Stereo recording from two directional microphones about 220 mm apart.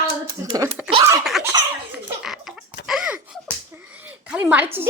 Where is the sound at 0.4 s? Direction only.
15° right (ahead or behind).